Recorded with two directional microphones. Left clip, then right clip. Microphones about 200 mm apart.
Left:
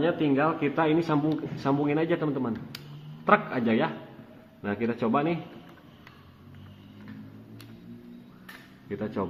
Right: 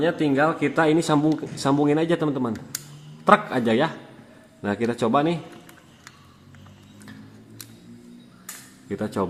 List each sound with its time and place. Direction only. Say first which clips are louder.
0.0 s speech: right 4 dB; 50° right (ahead or behind)
8.9 s speech: right 5 dB; 55° right (ahead or behind)